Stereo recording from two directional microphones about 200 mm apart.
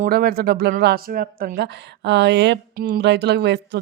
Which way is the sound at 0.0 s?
50° right (ahead or behind).